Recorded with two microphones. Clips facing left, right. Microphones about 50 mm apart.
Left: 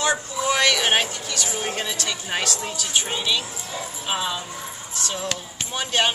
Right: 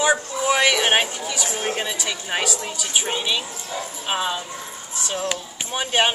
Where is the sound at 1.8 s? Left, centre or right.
Centre.